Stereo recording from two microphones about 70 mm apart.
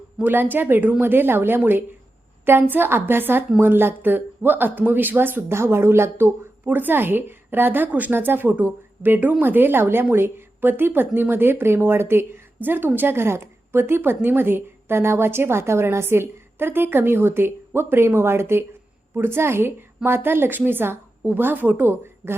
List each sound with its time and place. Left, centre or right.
0.2 s a woman's voice: right